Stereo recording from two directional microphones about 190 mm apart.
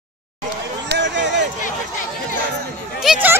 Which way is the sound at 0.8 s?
70° right (ahead or behind).